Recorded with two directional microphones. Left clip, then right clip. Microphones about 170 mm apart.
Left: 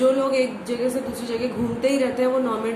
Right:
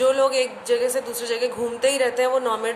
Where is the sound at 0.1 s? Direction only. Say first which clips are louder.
Right 1 dB; 50° right (ahead or behind).